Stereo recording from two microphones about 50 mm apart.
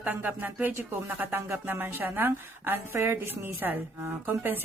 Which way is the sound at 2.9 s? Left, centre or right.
Right.